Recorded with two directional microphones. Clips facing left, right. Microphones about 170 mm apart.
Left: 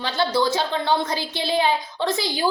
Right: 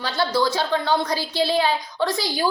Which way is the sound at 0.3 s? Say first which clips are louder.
Right 1 dB; 20° left (ahead or behind).